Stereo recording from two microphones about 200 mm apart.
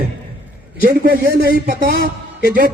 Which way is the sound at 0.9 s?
45° right (ahead or behind).